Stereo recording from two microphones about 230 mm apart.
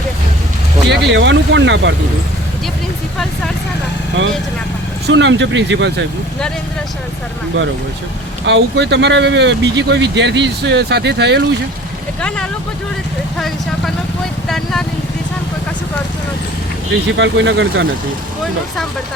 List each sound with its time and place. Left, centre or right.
0.9 s speech: right
5.0 s speech: right
8.4 s speech: right
14.5 s speech: centre
17.1 s speech: right